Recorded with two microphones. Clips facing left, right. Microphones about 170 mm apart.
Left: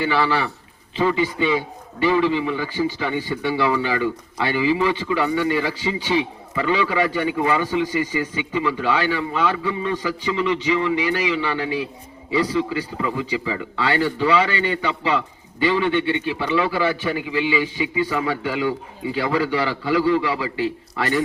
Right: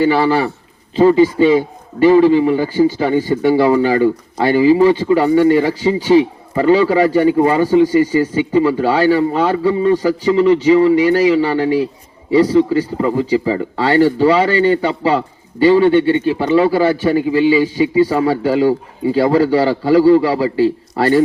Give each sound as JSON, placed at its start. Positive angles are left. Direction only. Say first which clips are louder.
{"t": 0.0, "sound": "a man's voice", "louder": "right 8 dB", "side_deg": -40}